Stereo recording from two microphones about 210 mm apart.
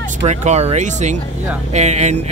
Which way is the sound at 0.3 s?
35° right (ahead or behind).